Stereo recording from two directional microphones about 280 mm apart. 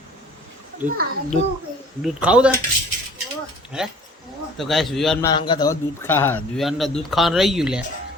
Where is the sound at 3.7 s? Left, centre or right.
Centre.